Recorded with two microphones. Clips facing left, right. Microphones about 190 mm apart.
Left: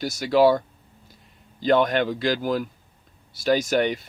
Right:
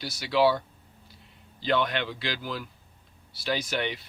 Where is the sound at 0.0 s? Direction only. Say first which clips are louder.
Left 6 dB; 45° left (ahead or behind).